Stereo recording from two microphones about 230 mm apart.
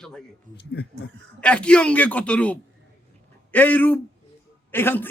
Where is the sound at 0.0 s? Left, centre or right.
Centre.